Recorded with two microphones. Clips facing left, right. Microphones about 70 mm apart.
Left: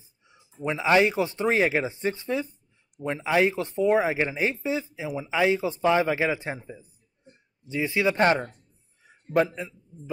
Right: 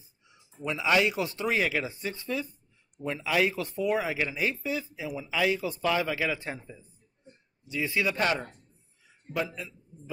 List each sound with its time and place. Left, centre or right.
0.3 s speech: left
7.6 s speech: left
8.2 s speech: left
9.0 s a sound: left
9.5 s speech: left